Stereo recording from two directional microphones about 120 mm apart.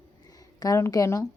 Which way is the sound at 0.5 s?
25° left (ahead or behind).